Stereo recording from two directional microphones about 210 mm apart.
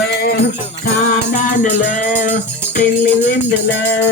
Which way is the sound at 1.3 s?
40° left (ahead or behind).